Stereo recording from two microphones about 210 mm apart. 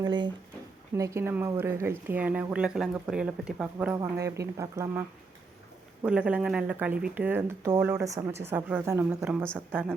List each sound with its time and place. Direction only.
0.0 s speech: 20° right (ahead or behind); by 9.6 s centre (ahead or behind)